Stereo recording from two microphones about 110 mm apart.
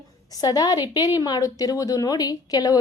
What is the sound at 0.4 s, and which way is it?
A woman's voice, 35° left (ahead or behind).